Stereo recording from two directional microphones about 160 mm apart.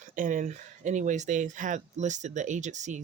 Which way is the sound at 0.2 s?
55° right (ahead or behind).